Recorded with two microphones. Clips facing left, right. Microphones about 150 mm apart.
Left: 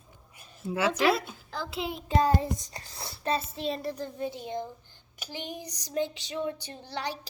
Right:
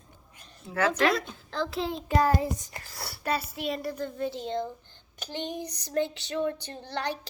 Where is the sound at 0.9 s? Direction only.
5° left (ahead or behind).